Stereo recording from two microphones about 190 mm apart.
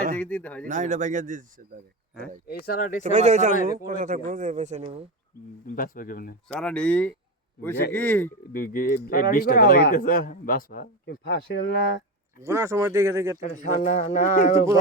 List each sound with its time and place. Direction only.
0.2 s speech: 5° left (ahead or behind)
0.7 s a man's voice: 40° right (ahead or behind)
2.5 s speech: 50° left (ahead or behind)
3.0 s a man's voice: 35° right (ahead or behind)
5.6 s speech: 50° left (ahead or behind)
6.5 s speech: 5° left (ahead or behind)
8.5 s speech: 50° left (ahead or behind)
12.4 s speech: 15° right (ahead or behind)
13.4 s speech: 40° left (ahead or behind)